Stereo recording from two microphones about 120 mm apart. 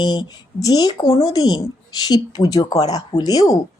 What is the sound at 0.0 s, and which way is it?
Speech, 35° left (ahead or behind).